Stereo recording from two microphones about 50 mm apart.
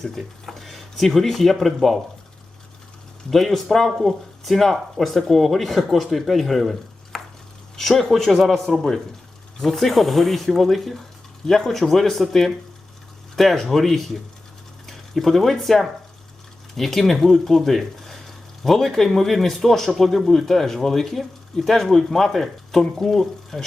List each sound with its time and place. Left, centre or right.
0.0 s speech: centre
3.2 s speech: centre